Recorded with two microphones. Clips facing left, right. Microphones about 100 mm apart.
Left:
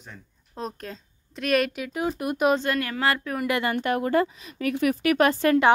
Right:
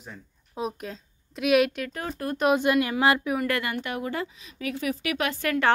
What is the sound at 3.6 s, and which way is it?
A woman's voice, 45° left (ahead or behind).